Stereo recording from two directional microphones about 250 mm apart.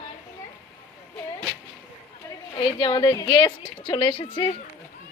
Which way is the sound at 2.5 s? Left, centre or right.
Centre.